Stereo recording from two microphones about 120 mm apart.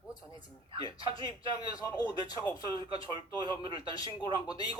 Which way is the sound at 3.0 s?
45° right (ahead or behind).